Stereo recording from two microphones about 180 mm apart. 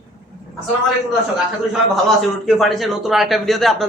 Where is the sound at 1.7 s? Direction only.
Centre (ahead or behind).